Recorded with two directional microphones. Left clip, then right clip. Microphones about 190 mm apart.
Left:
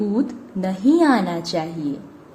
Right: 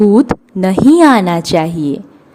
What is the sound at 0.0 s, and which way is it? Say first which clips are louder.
A woman's voice: right 14 dB; 40° right (ahead or behind).